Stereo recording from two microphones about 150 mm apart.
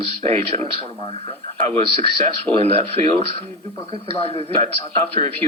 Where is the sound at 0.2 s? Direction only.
45° right (ahead or behind).